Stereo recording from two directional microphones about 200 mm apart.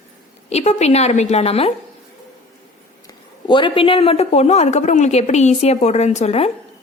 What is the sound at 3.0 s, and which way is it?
A woman's voice, 25° left (ahead or behind).